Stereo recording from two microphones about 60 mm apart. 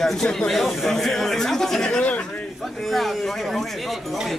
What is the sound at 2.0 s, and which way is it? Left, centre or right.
Speech, left.